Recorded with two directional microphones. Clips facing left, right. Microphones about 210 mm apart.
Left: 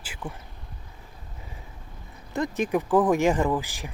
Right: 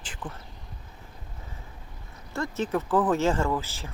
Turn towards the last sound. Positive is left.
turn(degrees=15)  # may be behind; listen again after turning